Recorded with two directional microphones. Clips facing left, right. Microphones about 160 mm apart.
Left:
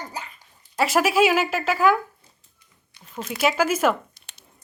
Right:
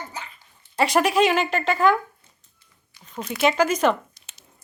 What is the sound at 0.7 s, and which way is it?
Speech, 5° left (ahead or behind).